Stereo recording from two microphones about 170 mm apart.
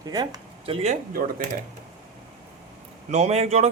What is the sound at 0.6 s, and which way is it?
Speech, 35° right (ahead or behind).